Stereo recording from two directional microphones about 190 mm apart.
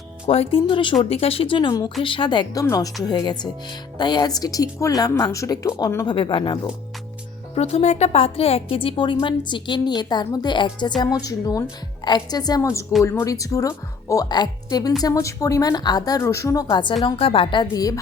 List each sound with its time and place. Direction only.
0.3 s a woman's voice: 30° left (ahead or behind)
7.5 s a woman's voice: 35° left (ahead or behind); by 18.0 s 20° left (ahead or behind)